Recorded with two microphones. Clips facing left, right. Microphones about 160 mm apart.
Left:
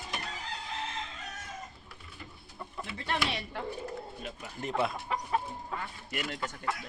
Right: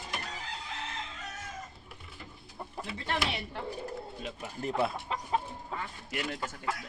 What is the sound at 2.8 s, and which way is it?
Speech, 25° right (ahead or behind).